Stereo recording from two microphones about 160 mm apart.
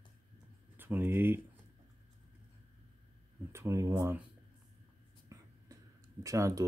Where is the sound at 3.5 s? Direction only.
15° right (ahead or behind).